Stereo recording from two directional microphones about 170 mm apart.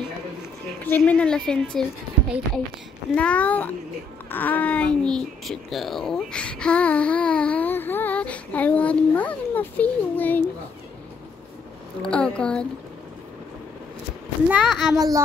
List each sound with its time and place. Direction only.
0.8 s a woman's voice: 10° left (ahead or behind)
3.2 s speech: 5° left (ahead or behind)
12.0 s speech: 5° left (ahead or behind)
14.5 s a woman's voice: centre (ahead or behind)
15.0 s speech: 20° right (ahead or behind)